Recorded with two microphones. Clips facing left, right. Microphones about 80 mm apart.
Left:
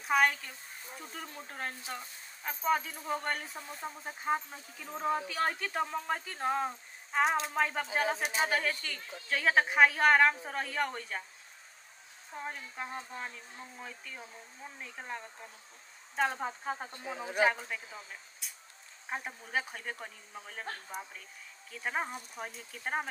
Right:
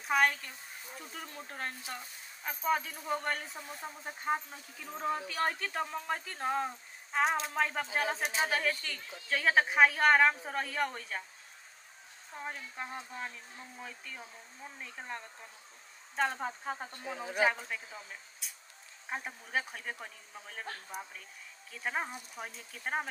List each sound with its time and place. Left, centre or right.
0.0 s speech: centre
12.4 s speech: centre